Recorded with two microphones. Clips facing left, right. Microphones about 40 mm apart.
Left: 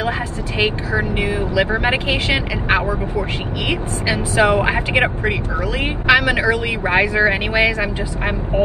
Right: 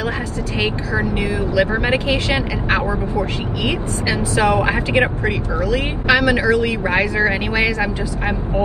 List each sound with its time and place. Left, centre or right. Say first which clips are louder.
0.6 s speech: left 2 dB; left